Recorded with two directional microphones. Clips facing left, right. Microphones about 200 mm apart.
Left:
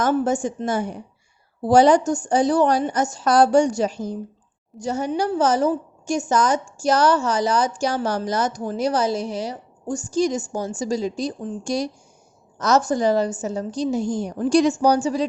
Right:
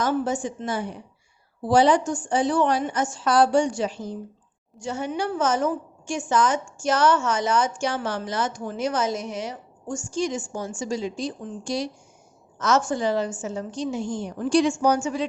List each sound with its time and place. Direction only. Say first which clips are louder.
0.0 s a woman's voice: left 4 dB; 50° left (ahead or behind)